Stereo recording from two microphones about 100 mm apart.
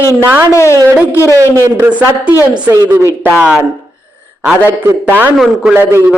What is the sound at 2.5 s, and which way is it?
Speech, 40° right (ahead or behind).